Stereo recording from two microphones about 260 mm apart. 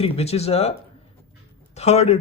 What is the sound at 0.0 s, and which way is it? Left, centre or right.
Speech, left.